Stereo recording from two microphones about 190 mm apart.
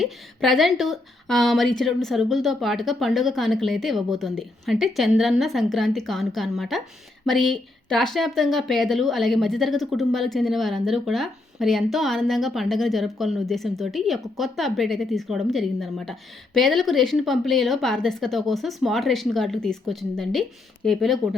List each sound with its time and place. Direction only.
0.0 s speech: centre (ahead or behind)